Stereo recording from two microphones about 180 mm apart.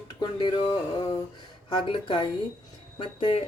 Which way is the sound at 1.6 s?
25° left (ahead or behind).